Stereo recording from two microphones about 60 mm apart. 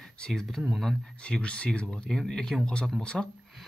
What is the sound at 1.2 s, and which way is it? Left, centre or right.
Speech, centre.